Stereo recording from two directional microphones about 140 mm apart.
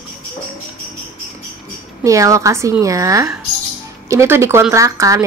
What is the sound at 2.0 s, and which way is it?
A woman's voice, 20° right (ahead or behind).